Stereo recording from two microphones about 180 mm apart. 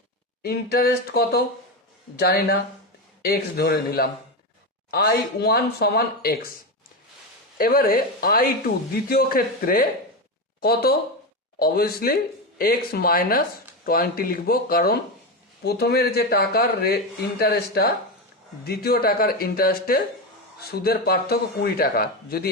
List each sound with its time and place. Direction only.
0.4 s a man's voice: 60° left (ahead or behind)
7.6 s a man's voice: 55° left (ahead or behind)